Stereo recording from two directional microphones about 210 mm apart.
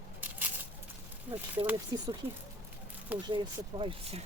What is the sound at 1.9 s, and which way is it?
Speech, 20° right (ahead or behind).